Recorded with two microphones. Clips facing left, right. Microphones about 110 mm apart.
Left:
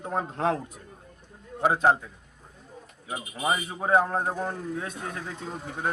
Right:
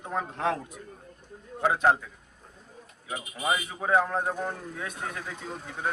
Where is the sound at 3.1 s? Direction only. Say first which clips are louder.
Left 1 dB; 20° left (ahead or behind).